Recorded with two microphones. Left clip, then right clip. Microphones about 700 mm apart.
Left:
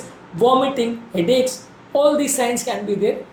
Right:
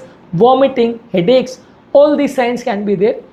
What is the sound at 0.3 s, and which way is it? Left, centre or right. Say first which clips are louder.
Speech: right 6 dB; right.